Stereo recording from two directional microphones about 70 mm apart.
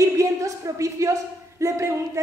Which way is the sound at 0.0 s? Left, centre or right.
Right.